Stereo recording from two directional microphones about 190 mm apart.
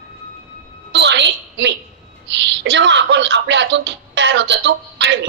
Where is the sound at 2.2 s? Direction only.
70° right (ahead or behind).